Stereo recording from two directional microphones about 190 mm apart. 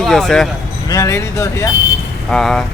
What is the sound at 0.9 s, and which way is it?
Speech, 15° left (ahead or behind).